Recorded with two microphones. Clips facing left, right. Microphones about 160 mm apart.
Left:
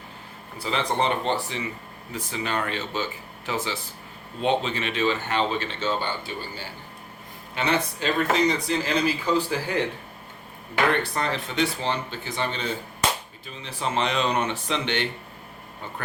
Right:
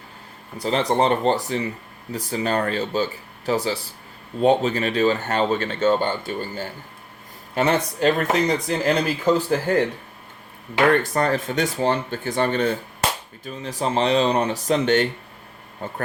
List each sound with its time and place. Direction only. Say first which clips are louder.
0.6 s speech: right 5 dB; 40° right (ahead or behind)
10.9 s speech: right 6 dB; 45° right (ahead or behind)